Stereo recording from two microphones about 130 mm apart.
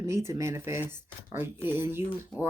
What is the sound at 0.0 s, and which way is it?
Speech, 20° right (ahead or behind).